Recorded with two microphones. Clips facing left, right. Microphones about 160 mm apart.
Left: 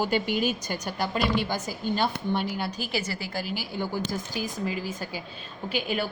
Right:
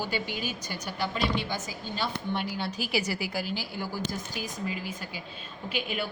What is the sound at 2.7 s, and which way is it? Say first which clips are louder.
Speech: right 1 dB; 5° right (ahead or behind).